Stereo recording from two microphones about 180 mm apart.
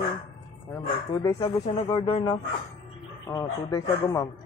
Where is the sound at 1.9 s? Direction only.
30° left (ahead or behind).